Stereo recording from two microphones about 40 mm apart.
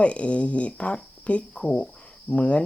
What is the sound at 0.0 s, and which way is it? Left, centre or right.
Speech, left.